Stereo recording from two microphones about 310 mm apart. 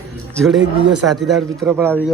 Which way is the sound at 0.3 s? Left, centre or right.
Centre.